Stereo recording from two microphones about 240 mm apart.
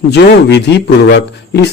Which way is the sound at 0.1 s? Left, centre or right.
Left.